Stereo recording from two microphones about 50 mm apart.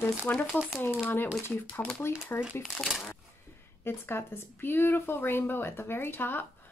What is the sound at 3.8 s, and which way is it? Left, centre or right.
A woman's voice, left.